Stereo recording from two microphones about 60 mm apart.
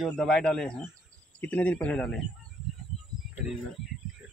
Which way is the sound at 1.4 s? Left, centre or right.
Left.